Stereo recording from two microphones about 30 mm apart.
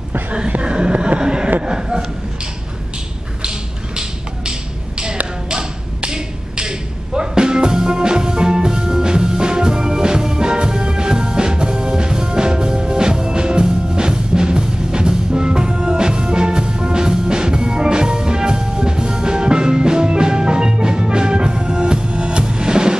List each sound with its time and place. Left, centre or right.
0.6 s a sound: right
4.5 s tap: right
6.0 s music: right